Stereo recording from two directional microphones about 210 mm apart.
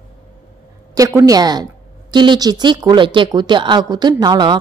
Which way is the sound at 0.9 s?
15° right (ahead or behind).